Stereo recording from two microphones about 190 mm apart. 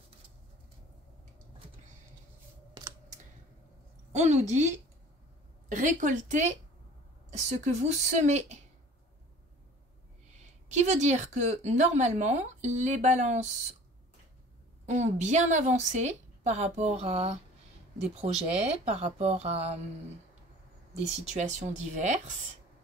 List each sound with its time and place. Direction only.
2.8 s computer keyboard: 20° right (ahead or behind)
4.1 s a woman's voice: 35° right (ahead or behind)
10.3 s a woman's voice: 35° right (ahead or behind)
14.9 s a woman's voice: 40° right (ahead or behind)
21.3 s a woman's voice: 35° right (ahead or behind)